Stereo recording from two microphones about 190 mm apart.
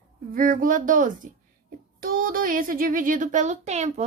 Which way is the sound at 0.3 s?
45° right (ahead or behind).